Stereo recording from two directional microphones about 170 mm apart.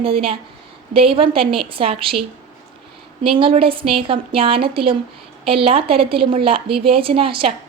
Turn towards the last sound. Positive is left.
turn(degrees=-30)  # may be behind; listen again after turning